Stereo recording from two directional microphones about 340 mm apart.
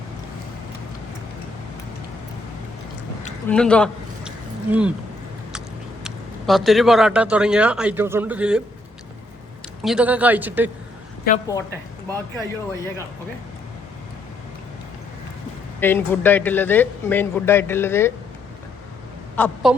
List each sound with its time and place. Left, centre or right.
3.4 s a man's voice: centre
9.8 s speech: centre
11.3 s a woman's voice: left
15.8 s speech: centre
19.4 s speech: centre